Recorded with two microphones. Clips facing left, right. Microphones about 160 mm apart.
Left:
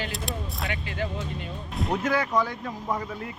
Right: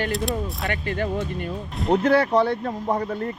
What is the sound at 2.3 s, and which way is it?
Speech, 65° right (ahead or behind).